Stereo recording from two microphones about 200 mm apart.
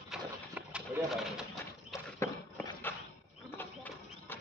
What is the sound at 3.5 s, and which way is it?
Clip-clop, 10° left (ahead or behind).